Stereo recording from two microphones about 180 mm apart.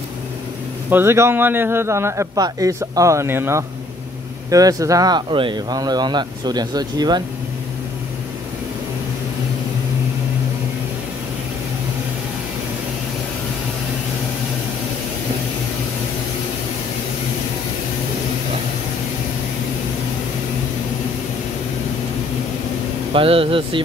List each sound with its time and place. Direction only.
0.8 s speech: 15° right (ahead or behind)
23.1 s speech: 30° right (ahead or behind)